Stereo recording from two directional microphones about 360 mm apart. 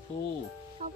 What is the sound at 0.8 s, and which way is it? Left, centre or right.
Music, centre.